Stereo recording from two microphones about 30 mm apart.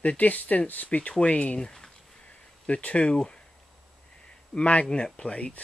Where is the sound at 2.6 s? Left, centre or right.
Left.